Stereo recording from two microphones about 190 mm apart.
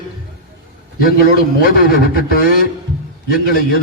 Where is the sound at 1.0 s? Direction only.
50° left (ahead or behind).